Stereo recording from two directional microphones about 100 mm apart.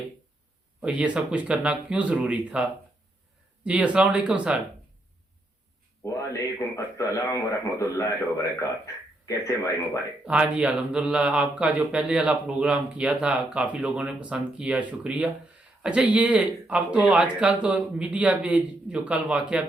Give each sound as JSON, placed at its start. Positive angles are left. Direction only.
{"t": 0.8, "sound": "speech", "side_deg": -15}
{"t": 6.0, "sound": "a man's voice", "side_deg": 30}
{"t": 9.2, "sound": "a man's voice", "side_deg": 30}
{"t": 10.2, "sound": "speech", "side_deg": -10}